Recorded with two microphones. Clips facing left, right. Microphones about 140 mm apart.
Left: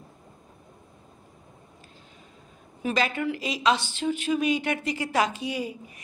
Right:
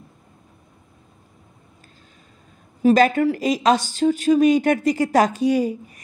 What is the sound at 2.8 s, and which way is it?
A woman's voice, 45° right (ahead or behind).